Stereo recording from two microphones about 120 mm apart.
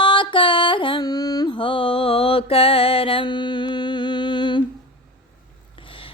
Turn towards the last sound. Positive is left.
turn(degrees=40)  # may be behind; listen again after turning